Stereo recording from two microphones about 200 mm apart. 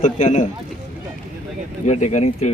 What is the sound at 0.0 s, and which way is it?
Speech, 40° left (ahead or behind).